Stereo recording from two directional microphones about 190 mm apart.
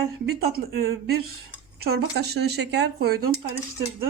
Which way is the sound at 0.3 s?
55° right (ahead or behind).